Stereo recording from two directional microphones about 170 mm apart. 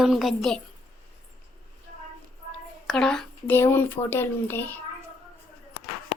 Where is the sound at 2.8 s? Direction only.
5° left (ahead or behind).